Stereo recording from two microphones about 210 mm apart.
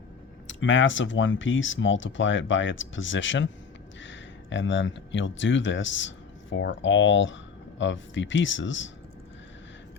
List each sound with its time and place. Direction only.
0.4 s speech: 65° left (ahead or behind)